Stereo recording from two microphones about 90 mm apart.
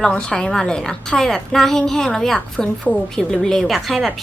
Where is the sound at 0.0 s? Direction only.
10° left (ahead or behind).